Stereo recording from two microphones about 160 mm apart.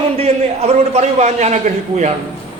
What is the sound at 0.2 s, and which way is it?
A man's voice, 40° right (ahead or behind).